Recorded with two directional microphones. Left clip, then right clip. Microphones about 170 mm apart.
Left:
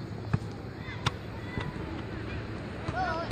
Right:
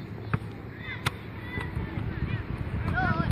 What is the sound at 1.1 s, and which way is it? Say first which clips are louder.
Chop: right 1 dB; 5° right (ahead or behind).